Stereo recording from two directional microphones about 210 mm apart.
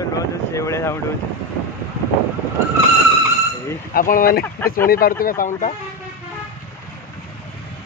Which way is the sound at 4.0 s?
40° left (ahead or behind).